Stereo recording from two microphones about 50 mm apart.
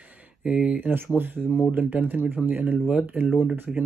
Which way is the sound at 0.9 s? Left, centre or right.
Right.